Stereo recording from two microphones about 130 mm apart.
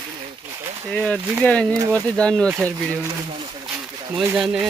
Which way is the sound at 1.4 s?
10° left (ahead or behind).